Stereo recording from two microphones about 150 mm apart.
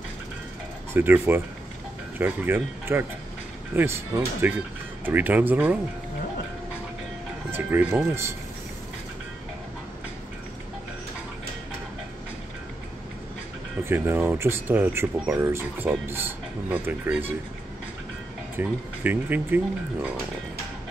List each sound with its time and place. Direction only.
0.9 s speech: 15° right (ahead or behind)
7.5 s speech: 15° right (ahead or behind)
13.8 s speech: 15° right (ahead or behind)
18.6 s speech: 10° right (ahead or behind)